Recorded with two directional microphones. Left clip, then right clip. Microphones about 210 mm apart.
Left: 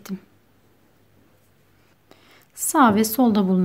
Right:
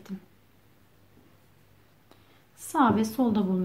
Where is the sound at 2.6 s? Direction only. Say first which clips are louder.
Left 7 dB; 45° left (ahead or behind).